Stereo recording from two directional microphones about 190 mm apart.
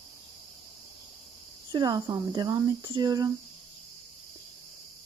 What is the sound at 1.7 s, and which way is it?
Speech, 20° right (ahead or behind).